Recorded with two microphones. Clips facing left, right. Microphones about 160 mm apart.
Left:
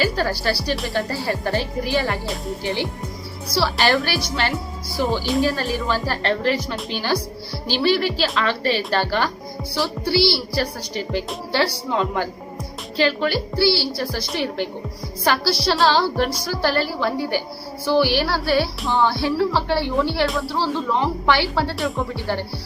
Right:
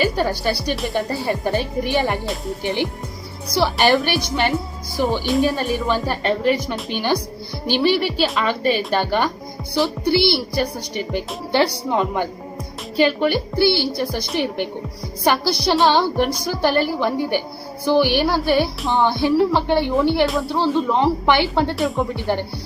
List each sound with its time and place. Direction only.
0.0 s a woman's voice: 15° right (ahead or behind)
20.2 s speech: centre (ahead or behind)
20.5 s a woman's voice: 20° right (ahead or behind)